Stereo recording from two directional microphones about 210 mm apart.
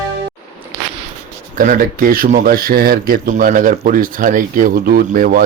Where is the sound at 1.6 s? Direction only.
40° right (ahead or behind).